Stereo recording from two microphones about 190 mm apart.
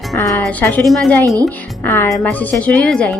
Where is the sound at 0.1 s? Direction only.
5° left (ahead or behind).